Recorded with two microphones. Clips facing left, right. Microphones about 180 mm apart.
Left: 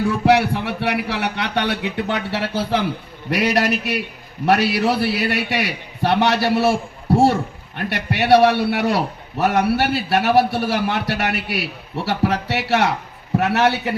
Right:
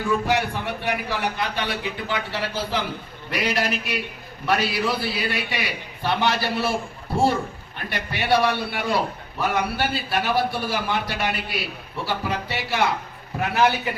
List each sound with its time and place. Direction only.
0.1 s a man's voice: 70° left (ahead or behind)